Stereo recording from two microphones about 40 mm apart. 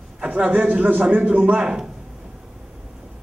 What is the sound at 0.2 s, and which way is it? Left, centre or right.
A man's voice, right.